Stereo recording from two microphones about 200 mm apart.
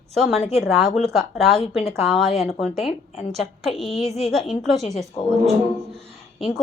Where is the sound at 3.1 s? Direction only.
35° left (ahead or behind).